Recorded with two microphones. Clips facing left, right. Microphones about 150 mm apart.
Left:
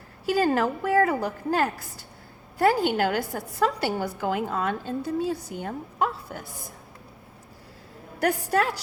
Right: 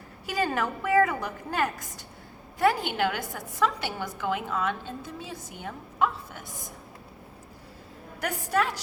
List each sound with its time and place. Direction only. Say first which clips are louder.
0.3 s a woman's voice: left 6 dB; 35° left (ahead or behind)
8.4 s a woman's voice: right 1 dB; 35° left (ahead or behind)